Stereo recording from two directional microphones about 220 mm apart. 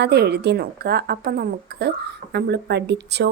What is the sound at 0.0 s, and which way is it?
A woman's voice, 50° right (ahead or behind).